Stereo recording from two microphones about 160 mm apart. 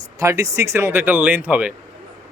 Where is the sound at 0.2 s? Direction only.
20° right (ahead or behind).